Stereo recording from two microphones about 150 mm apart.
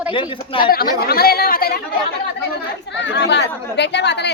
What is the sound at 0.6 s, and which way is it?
Speech, 80° left.